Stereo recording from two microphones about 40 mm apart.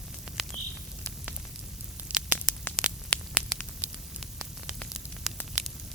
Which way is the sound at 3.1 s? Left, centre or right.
Left.